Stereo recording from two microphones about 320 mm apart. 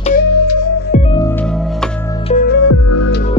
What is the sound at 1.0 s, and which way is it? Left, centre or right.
Music, centre.